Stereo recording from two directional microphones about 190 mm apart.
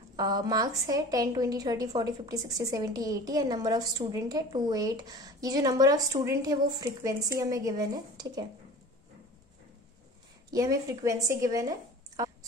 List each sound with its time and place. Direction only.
0.1 s a woman's voice: 20° right (ahead or behind)
10.5 s a woman's voice: 20° right (ahead or behind)